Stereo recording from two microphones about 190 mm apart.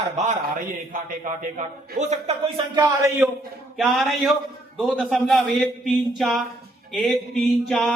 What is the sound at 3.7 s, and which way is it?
A man's voice, centre (ahead or behind).